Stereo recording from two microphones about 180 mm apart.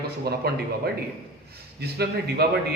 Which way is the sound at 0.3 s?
60° right (ahead or behind).